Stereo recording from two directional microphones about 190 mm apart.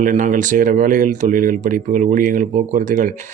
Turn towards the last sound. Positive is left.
turn(degrees=-40)  # may be behind; listen again after turning